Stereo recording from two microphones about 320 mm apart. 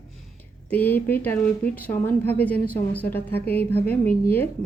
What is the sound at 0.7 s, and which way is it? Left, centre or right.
Speech, centre.